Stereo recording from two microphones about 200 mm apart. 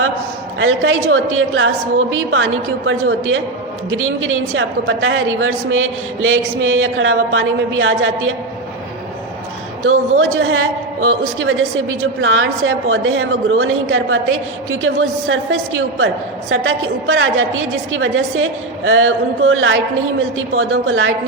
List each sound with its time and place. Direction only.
0.6 s a woman's voice: 90° right
9.8 s a woman's voice: 90° right